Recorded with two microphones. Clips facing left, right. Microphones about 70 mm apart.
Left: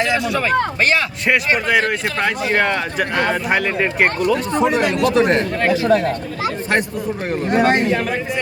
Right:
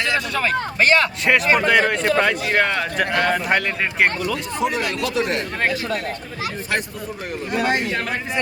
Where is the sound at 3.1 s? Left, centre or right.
Left.